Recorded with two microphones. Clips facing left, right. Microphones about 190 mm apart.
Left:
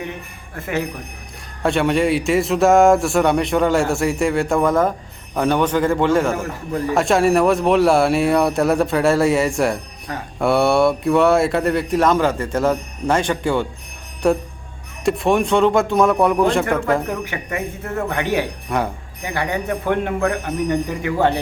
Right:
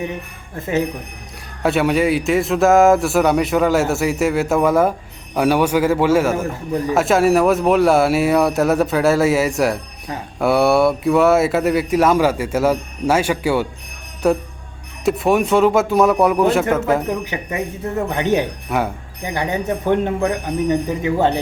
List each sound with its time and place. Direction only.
1.6 s speech: 5° right (ahead or behind)
17.1 s a man's voice: 15° right (ahead or behind)
18.7 s speech: 5° right (ahead or behind)
19.2 s a man's voice: 20° right (ahead or behind)